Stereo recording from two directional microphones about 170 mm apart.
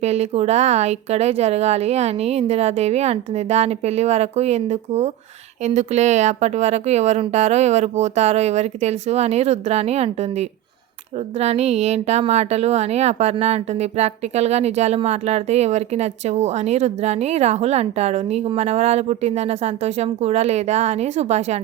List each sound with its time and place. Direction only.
0.0 s a woman's voice: 40° right (ahead or behind)